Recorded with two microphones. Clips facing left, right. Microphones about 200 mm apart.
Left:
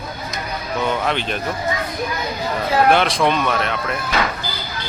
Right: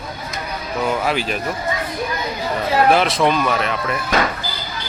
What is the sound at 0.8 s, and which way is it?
Speech, 5° right (ahead or behind).